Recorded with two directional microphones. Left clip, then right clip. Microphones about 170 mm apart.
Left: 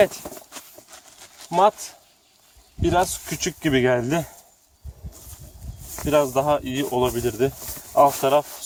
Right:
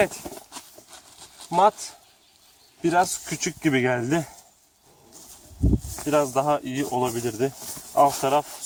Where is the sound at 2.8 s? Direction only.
55° left (ahead or behind).